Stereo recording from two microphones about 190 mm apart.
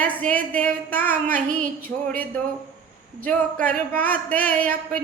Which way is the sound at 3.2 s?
5° left (ahead or behind).